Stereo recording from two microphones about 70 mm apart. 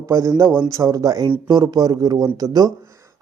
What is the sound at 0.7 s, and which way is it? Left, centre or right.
Speech, right.